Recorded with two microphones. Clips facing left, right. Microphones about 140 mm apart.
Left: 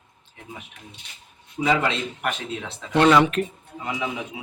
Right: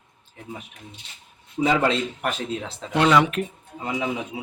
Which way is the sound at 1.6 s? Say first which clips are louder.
Right 2 dB; 35° right (ahead or behind).